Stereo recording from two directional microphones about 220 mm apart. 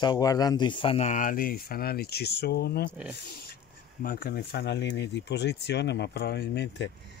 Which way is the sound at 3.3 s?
45° left (ahead or behind).